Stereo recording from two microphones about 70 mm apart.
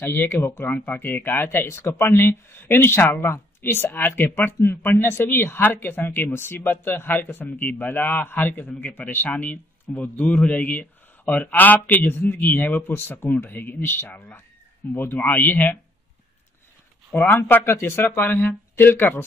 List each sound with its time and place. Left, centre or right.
0.0 s a man's voice: left
1.7 s a man's voice: left
17.1 s speech: left